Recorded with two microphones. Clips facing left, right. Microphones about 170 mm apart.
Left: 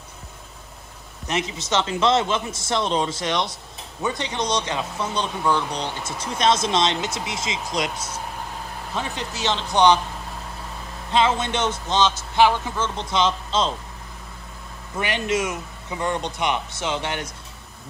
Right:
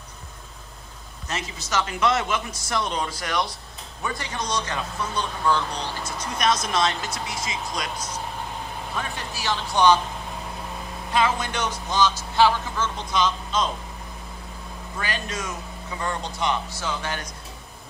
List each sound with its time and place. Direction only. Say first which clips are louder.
1.2 s speech: left 6 dB; 20° left (ahead or behind)
6.3 s speech: left 3 dB; 25° left (ahead or behind)
9.1 s speech: left 3 dB; 20° left (ahead or behind)
11.1 s speech: left 3 dB; 25° left (ahead or behind)
15.0 s speech: left 7 dB; 20° left (ahead or behind)